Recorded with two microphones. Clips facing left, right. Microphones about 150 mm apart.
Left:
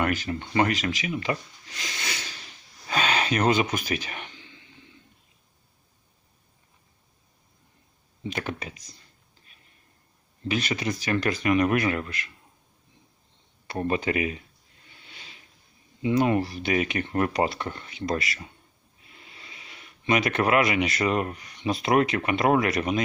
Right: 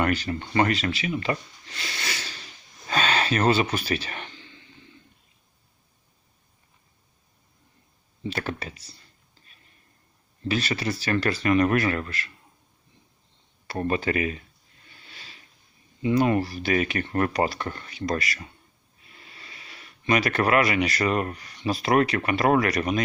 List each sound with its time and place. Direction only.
0.0 s speech: 10° left (ahead or behind)
2.8 s a sound: 10° left (ahead or behind)
8.2 s speech: 15° left (ahead or behind)
10.5 s speech: 15° left (ahead or behind)
13.7 s speech: 15° left (ahead or behind)
15.0 s a sound: 20° left (ahead or behind)
16.0 s speech: 20° left (ahead or behind)